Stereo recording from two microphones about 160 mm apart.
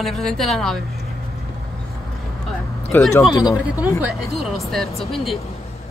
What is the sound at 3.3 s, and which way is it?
Speech, 20° left (ahead or behind).